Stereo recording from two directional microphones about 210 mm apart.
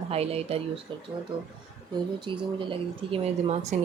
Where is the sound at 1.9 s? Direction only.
20° right (ahead or behind).